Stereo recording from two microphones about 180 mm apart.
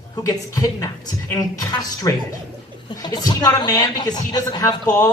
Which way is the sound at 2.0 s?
20° left (ahead or behind).